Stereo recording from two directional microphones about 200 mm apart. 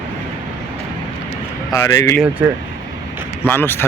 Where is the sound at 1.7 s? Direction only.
15° left (ahead or behind).